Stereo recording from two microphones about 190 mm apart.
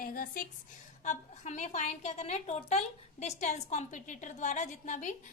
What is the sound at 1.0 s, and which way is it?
A woman's voice, 40° left (ahead or behind).